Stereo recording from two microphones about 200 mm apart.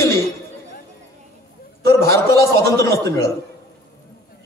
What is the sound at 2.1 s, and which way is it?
A man's voice, 15° left (ahead or behind).